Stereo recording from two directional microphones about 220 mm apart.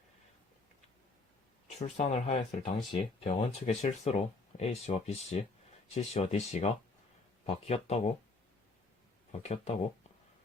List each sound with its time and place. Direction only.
1.8 s speech: 30° left (ahead or behind)
9.3 s speech: 30° left (ahead or behind)